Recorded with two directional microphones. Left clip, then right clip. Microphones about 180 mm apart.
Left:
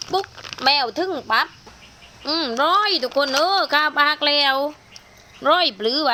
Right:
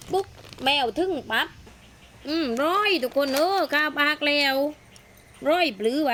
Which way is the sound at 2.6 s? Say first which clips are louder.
Left 5 dB; 50° right (ahead or behind).